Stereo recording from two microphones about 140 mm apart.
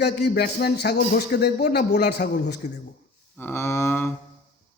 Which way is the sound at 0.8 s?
90° left.